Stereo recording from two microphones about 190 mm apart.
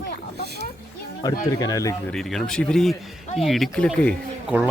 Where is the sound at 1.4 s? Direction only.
20° left (ahead or behind).